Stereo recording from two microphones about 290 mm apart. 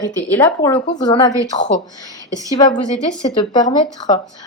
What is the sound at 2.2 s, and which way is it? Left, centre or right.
Speech, centre.